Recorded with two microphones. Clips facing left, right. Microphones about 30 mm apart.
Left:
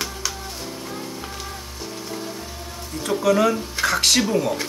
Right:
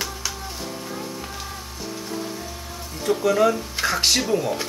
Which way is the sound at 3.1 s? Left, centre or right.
Centre.